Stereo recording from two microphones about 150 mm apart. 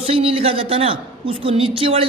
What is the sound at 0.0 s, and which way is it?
A woman's voice, 40° right (ahead or behind).